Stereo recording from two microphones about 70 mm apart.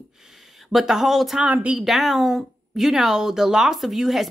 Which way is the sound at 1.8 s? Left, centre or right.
Centre.